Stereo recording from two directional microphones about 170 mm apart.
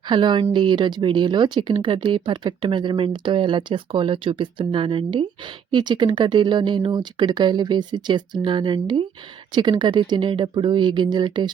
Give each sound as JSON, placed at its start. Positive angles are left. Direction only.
{"t": 0.1, "sound": "speech", "side_deg": -30}